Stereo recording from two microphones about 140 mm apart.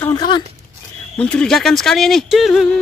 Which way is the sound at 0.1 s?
30° left (ahead or behind).